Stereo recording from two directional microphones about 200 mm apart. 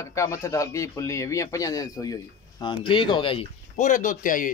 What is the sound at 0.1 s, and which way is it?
Speech, 15° left (ahead or behind).